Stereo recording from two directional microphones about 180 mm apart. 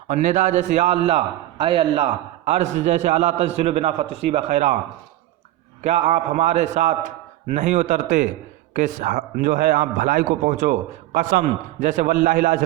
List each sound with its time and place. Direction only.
0.1 s a man's voice: 45° right (ahead or behind)
5.8 s a man's voice: 40° right (ahead or behind)